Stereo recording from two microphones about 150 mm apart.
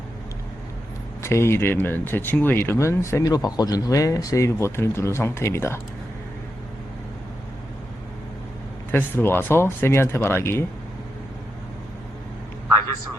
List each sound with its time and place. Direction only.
1.2 s speech: 15° left (ahead or behind)
8.9 s speech: 15° left (ahead or behind)